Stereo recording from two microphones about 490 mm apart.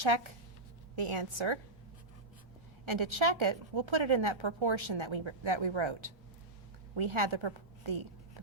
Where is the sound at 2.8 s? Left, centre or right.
Right.